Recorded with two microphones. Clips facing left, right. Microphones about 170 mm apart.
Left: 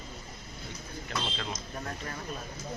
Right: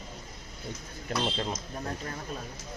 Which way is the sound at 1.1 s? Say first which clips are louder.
Right 6 dB; 35° right (ahead or behind).